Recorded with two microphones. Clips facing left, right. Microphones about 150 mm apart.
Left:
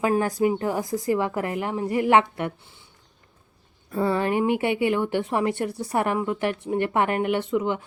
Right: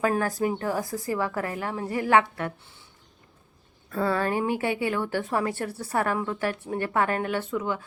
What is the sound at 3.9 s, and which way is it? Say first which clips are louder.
A woman's voice: left 2 dB; 20° left (ahead or behind).